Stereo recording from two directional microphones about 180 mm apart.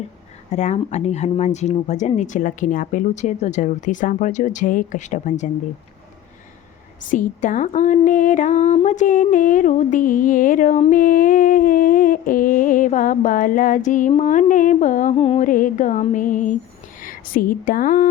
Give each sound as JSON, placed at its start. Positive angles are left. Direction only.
{"t": 0.5, "sound": "speech", "side_deg": 40}
{"t": 7.1, "sound": "speech", "side_deg": 45}
{"t": 15.1, "sound": "speech", "side_deg": 35}
{"t": 15.4, "sound": "speech", "side_deg": 50}